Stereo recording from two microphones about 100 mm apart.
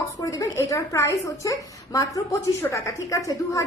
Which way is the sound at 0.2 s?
30° left (ahead or behind).